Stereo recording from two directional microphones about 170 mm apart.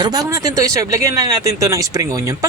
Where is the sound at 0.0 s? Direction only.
20° right (ahead or behind).